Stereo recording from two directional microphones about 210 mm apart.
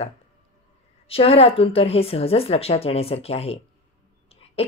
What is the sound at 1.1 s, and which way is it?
Speech, 25° left (ahead or behind).